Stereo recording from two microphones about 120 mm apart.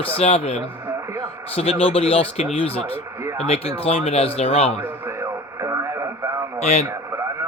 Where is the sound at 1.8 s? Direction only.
55° left (ahead or behind).